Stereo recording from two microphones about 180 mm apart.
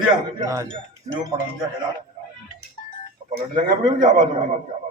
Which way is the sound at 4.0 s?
45° right (ahead or behind).